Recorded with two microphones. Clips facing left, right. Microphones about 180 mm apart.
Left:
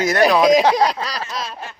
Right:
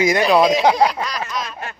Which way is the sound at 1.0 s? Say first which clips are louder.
Right 1 dB; 35° left (ahead or behind).